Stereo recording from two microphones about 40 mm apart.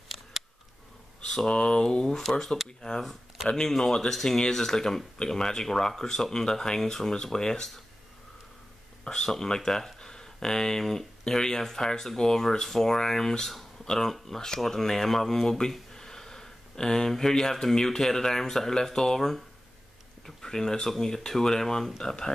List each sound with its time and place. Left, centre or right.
1.2 s speech: centre
2.2 s speech: centre
3.4 s speech: centre
9.0 s speech: centre